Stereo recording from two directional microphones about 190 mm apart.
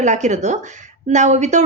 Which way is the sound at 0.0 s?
40° right (ahead or behind).